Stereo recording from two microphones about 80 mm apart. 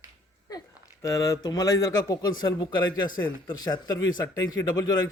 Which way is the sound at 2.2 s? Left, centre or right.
Left.